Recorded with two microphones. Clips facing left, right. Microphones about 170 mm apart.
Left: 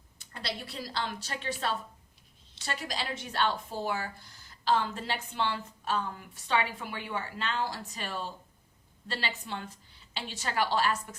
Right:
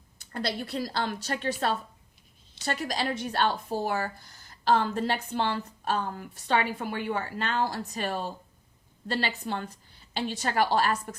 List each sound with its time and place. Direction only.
0.3 s a woman's voice: 50° right (ahead or behind)